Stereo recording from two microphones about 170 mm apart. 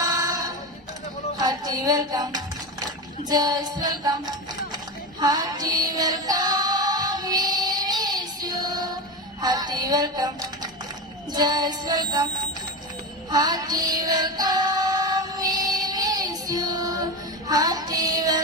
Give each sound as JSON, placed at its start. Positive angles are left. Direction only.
{"t": 0.0, "sound": "music", "side_deg": -20}
{"t": 13.3, "sound": "music", "side_deg": -25}